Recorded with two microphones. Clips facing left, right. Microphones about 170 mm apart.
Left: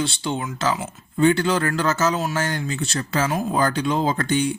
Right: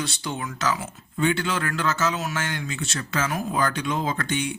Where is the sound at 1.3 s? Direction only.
40° left (ahead or behind).